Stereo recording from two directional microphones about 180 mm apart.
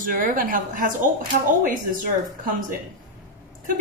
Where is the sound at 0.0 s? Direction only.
50° right (ahead or behind).